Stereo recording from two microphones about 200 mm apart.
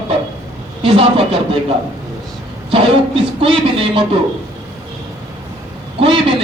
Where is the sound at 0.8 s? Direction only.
25° right (ahead or behind).